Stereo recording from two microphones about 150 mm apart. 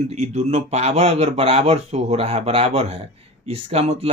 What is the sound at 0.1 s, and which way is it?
Speech, 45° right (ahead or behind).